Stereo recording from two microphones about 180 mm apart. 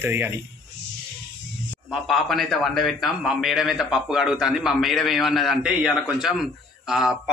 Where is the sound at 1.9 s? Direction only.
Centre (ahead or behind).